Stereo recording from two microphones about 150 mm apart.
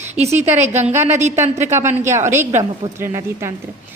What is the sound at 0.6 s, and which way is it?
Speech, 50° right (ahead or behind).